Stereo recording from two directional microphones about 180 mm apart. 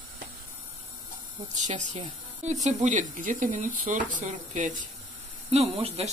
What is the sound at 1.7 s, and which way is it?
Speech, 45° right (ahead or behind).